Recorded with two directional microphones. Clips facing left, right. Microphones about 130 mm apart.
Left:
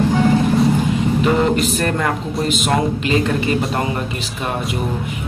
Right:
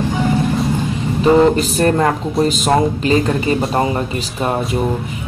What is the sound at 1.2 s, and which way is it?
Speech, 35° right (ahead or behind).